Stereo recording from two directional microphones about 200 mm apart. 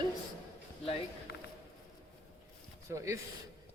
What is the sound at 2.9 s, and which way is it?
Speech, 15° right (ahead or behind).